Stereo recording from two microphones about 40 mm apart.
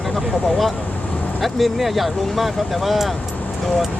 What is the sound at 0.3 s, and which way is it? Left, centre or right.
Speech, left.